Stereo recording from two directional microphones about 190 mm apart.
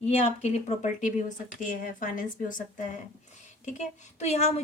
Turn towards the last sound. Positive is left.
turn(degrees=35)  # may be behind; listen again after turning